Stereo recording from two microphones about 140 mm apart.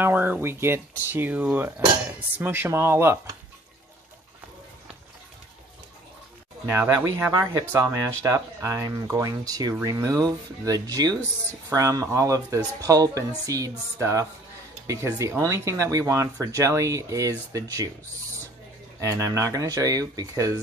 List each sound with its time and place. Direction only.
0.0 s speech: 15° right (ahead or behind)
6.7 s speech: 15° right (ahead or behind)
18.9 s speech: 20° right (ahead or behind)